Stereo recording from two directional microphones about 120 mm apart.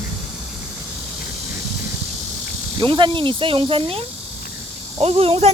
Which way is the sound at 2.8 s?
40° right (ahead or behind).